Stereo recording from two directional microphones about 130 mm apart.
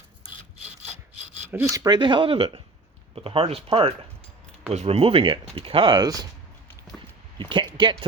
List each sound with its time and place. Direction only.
1.5 s speech: 15° right (ahead or behind)
1.7 s speech: 30° right (ahead or behind)
7.3 s a sound: 40° right (ahead or behind)